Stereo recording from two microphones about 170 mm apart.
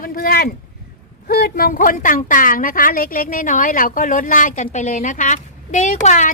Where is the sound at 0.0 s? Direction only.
65° left (ahead or behind).